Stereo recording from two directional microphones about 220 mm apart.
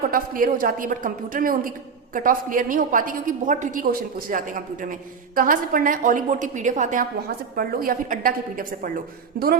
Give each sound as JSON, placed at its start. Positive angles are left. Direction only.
{"t": 0.1, "sound": "a woman's voice", "side_deg": -40}